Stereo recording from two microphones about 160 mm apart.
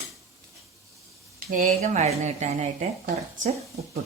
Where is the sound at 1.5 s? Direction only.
50° right (ahead or behind).